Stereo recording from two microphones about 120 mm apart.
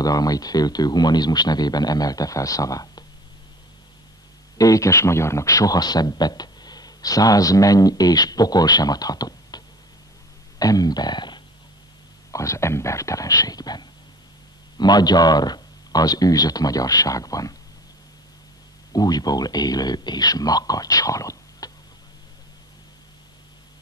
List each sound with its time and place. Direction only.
0.0 s speech: 30° left (ahead or behind)
4.6 s speech: 30° left (ahead or behind)
10.6 s a sound: 30° left (ahead or behind)
12.3 s speech: 25° left (ahead or behind)
18.9 s speech: 35° left (ahead or behind)